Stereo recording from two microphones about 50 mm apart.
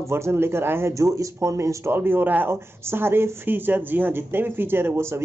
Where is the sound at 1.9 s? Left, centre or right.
Right.